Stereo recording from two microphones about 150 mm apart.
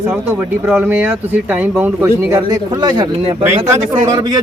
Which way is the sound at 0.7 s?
15° right (ahead or behind).